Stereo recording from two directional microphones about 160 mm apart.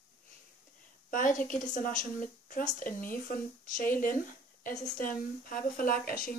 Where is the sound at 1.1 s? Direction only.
55° left (ahead or behind).